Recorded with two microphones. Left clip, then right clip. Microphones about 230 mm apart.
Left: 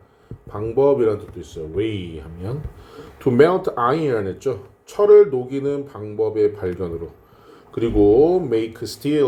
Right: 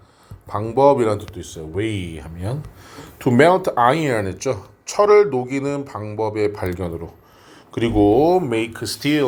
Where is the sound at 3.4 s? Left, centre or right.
Centre.